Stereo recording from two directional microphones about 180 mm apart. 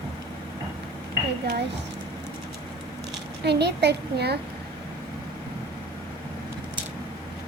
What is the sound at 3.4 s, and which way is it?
Speech, 70° right (ahead or behind).